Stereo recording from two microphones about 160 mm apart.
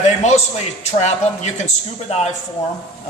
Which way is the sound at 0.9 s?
45° left (ahead or behind).